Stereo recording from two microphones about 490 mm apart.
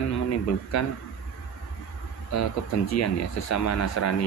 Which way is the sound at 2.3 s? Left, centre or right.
Left.